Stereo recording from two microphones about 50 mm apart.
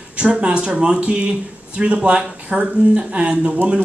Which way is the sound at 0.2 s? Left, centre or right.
Centre.